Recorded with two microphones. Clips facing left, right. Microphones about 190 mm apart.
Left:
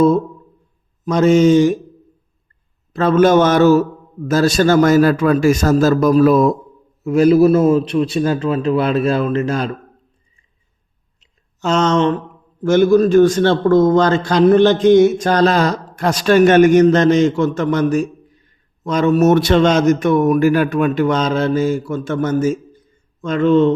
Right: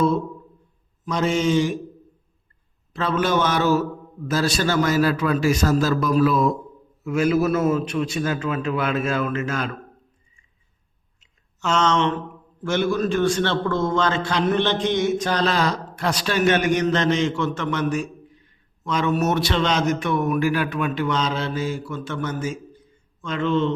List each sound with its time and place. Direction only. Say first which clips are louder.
1.0 s a man's voice: left 10 dB; 45° left (ahead or behind)
2.9 s a man's voice: left 10 dB; 45° left (ahead or behind)
11.2 s a sound: left 6 dB; 40° left (ahead or behind)
12.6 s a man's voice: left 10 dB; 45° left (ahead or behind)